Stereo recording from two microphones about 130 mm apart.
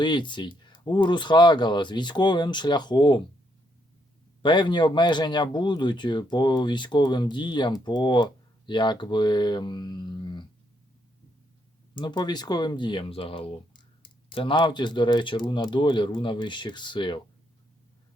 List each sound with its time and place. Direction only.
0.0 s speech: 35° left (ahead or behind)
4.4 s speech: 35° left (ahead or behind)
11.9 s speech: 35° left (ahead or behind)